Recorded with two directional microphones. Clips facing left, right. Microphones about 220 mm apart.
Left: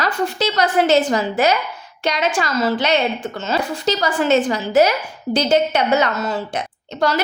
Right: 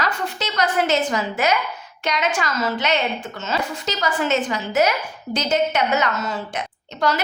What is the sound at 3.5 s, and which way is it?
A woman's voice, 35° left (ahead or behind).